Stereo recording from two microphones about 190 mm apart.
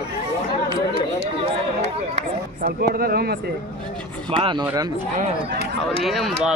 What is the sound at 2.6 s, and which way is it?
Speech, 55° right (ahead or behind).